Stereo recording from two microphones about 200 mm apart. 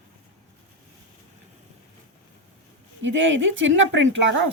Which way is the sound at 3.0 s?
70° right (ahead or behind).